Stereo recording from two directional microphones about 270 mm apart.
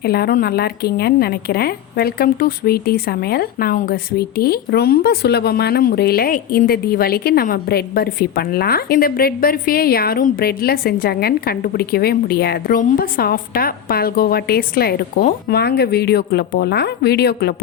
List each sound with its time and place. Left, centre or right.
0.0 s a woman's voice: left